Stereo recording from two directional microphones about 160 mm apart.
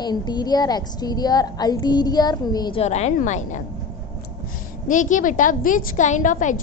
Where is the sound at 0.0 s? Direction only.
25° left (ahead or behind).